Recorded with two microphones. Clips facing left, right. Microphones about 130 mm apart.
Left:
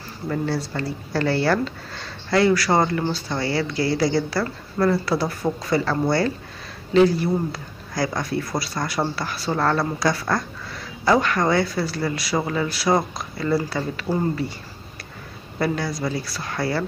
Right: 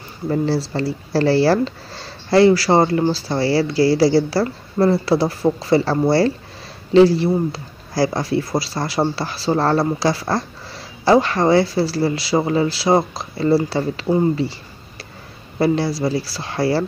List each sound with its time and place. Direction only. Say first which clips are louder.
0.3 s speech: right 5 dB; 30° right (ahead or behind)
15.6 s speech: right 6 dB; 30° right (ahead or behind)